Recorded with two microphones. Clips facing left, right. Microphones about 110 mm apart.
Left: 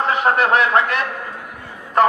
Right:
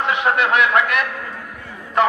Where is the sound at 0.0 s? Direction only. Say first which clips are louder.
Left 2 dB; 40° left (ahead or behind).